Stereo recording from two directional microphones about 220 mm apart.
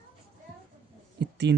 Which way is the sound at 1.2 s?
50° right (ahead or behind).